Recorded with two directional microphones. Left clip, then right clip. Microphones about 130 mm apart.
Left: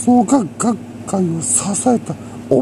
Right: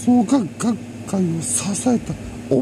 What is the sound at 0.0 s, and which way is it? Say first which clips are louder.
Speech: left 4 dB; 15° right (ahead or behind).